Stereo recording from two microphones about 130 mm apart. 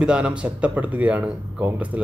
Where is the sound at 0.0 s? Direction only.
10° right (ahead or behind).